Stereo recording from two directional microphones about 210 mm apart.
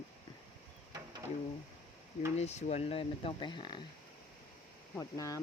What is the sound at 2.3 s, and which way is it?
Speech, 30° left (ahead or behind).